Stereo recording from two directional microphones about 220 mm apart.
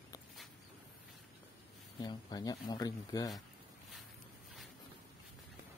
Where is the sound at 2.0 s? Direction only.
15° left (ahead or behind).